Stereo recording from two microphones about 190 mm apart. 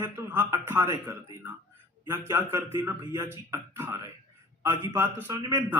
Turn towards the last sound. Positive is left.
turn(degrees=-15)  # may be behind; listen again after turning